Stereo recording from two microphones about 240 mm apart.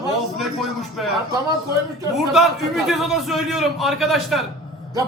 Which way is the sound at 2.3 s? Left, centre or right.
Centre.